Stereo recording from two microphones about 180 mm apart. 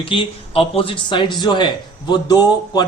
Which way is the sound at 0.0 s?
30° left (ahead or behind).